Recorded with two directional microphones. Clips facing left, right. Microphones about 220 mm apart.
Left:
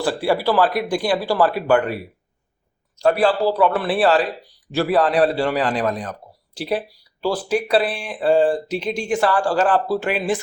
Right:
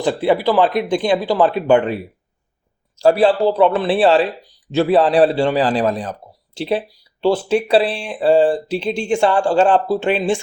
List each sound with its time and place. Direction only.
0.0 s a man's voice: 20° right (ahead or behind)
3.0 s a man's voice: 30° right (ahead or behind)